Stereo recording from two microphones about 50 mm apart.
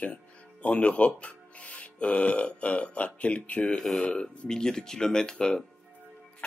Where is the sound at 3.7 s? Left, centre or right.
Centre.